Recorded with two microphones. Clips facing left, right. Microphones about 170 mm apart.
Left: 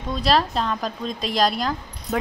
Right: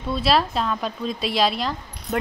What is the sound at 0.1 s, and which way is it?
Speech, 5° right (ahead or behind).